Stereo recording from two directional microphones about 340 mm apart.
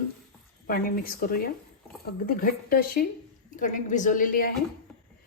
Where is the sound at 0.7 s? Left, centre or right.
Left.